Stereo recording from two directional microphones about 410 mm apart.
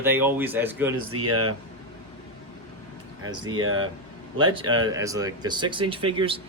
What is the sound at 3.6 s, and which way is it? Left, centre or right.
Speech, right.